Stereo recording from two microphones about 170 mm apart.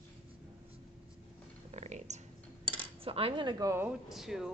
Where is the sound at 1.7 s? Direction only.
40° right (ahead or behind).